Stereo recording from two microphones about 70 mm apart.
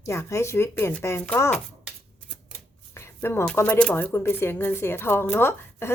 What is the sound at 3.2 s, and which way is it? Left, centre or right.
Speech, left.